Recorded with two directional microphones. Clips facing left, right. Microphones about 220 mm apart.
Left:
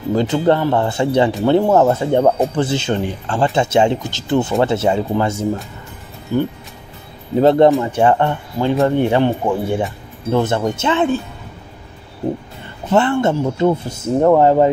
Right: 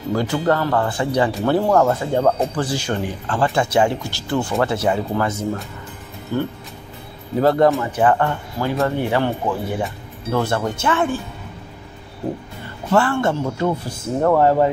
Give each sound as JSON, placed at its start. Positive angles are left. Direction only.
{"t": 0.1, "sound": "speech", "side_deg": 20}
{"t": 6.3, "sound": "speech", "side_deg": 15}
{"t": 12.9, "sound": "speech", "side_deg": 20}